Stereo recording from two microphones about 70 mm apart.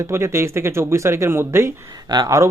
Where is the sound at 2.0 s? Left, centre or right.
Right.